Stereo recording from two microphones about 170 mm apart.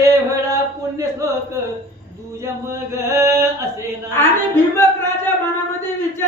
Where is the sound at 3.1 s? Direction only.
15° right (ahead or behind).